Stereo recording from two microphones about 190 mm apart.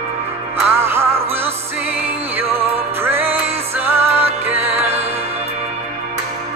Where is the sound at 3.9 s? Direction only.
30° right (ahead or behind).